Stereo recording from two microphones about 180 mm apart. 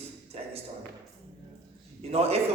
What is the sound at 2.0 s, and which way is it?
Speech, 35° right (ahead or behind).